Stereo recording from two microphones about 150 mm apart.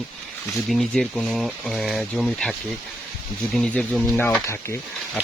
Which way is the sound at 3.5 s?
5° left (ahead or behind).